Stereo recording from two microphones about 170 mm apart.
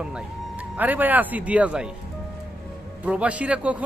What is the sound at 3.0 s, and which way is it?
Speech, 5° right (ahead or behind).